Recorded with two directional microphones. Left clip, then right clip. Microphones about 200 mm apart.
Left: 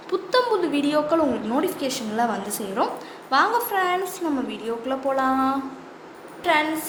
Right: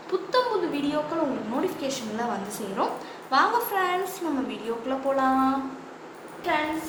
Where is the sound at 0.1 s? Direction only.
50° left (ahead or behind).